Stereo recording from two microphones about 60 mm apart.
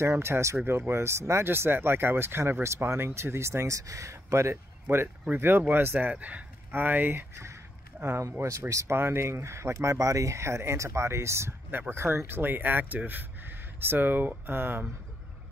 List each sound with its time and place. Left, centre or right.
0.0 s speech: right
4.8 s speech: right
8.2 s speech: right
8.9 s speech: right